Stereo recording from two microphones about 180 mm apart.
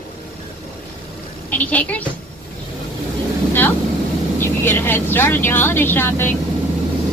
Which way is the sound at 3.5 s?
10° left (ahead or behind).